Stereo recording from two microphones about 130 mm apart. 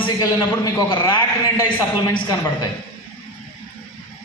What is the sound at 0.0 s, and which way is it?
A man's voice, 35° left (ahead or behind).